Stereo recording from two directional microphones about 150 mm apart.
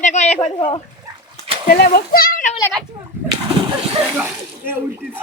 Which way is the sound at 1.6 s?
75° left (ahead or behind).